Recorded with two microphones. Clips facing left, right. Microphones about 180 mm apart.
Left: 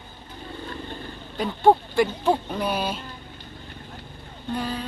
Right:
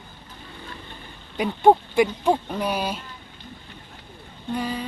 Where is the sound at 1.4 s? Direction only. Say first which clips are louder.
Right 1 dB; 15° right (ahead or behind).